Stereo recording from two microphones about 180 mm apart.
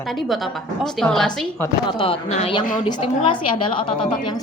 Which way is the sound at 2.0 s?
35° left (ahead or behind).